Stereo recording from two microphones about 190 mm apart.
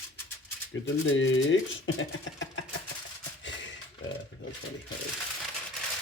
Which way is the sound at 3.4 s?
75° left (ahead or behind).